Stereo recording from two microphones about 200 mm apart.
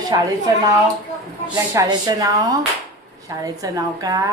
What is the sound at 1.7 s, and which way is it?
A woman's voice, 20° right (ahead or behind).